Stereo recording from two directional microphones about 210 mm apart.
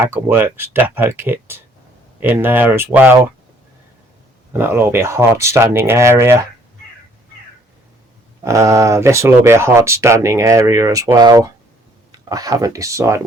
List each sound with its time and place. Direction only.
0.0 s speech: 10° right (ahead or behind)
4.5 s speech: 10° right (ahead or behind)
8.4 s speech: 15° right (ahead or behind)